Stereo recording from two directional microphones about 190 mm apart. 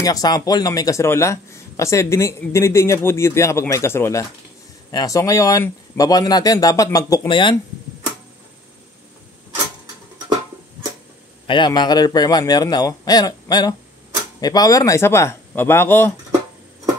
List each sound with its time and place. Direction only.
0.0 s speech: 20° left (ahead or behind)
11.4 s speech: 25° left (ahead or behind)